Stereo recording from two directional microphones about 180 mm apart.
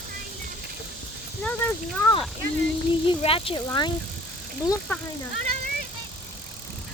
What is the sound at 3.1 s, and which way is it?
Speech, 30° left (ahead or behind).